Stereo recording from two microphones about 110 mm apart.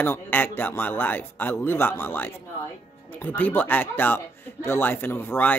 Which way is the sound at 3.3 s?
15° left (ahead or behind).